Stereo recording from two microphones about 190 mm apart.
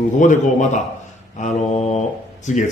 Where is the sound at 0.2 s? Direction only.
40° left (ahead or behind).